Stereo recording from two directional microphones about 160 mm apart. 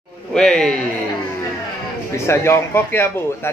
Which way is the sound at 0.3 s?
5° left (ahead or behind).